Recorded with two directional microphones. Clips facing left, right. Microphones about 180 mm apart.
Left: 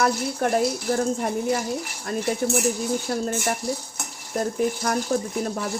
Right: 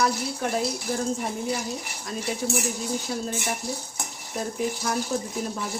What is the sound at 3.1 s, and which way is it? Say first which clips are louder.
Speech: left 5 dB; 60° left (ahead or behind).